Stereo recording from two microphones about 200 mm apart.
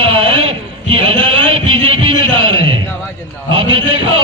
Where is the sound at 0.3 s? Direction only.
30° right (ahead or behind).